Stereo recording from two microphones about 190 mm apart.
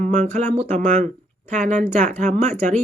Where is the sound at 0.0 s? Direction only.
40° right (ahead or behind).